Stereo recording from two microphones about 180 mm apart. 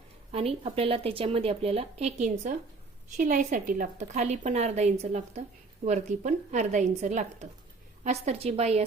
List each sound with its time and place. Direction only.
0.3 s speech: 35° right (ahead or behind)